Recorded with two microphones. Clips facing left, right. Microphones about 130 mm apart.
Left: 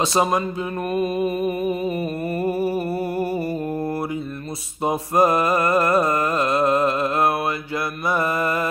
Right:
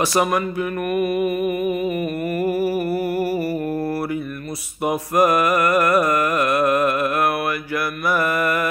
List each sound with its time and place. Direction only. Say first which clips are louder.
0.0 s mantra: right 1 dB; 25° left (ahead or behind)
4.8 s mantra: right 1 dB; 25° left (ahead or behind)